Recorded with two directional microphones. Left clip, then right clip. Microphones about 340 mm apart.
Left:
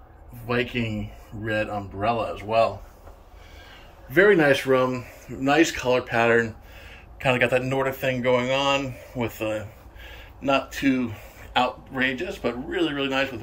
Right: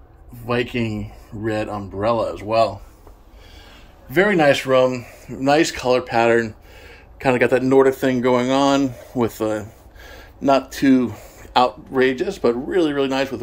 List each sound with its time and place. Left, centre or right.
0.5 s speech: centre
4.1 s a man's voice: centre
8.5 s speech: right
9.2 s speech: centre